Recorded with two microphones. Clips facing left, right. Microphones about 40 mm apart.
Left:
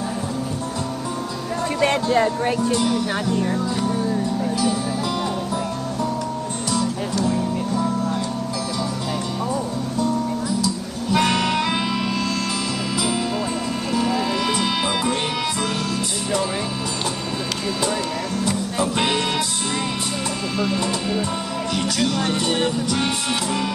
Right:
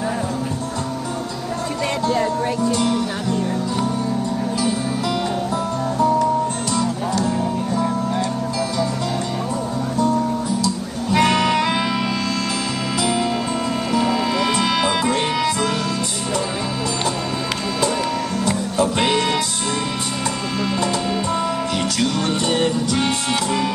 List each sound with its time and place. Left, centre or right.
1.8 s music: left
7.2 s music: centre
11.1 s music: centre
13.9 s music: right
14.6 s music: centre
18.9 s music: centre
20.8 s music: centre
22.9 s music: centre